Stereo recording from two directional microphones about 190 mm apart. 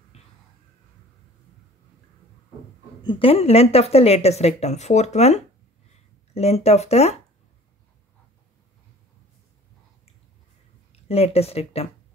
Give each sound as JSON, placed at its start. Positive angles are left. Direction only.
{"t": 0.1, "sound": "a sound", "side_deg": 35}
{"t": 3.0, "sound": "speech", "side_deg": 25}
{"t": 10.9, "sound": "speech", "side_deg": 30}